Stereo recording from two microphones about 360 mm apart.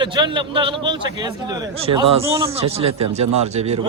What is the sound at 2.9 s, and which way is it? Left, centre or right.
Speech, right.